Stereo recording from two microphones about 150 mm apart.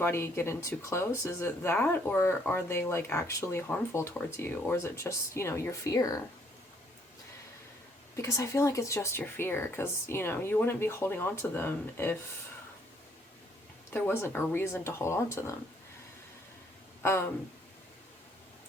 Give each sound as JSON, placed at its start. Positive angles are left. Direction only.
{"t": 0.0, "sound": "speech", "side_deg": 15}
{"t": 8.1, "sound": "speech", "side_deg": 20}
{"t": 13.9, "sound": "speech", "side_deg": 15}
{"t": 17.0, "sound": "speech", "side_deg": 15}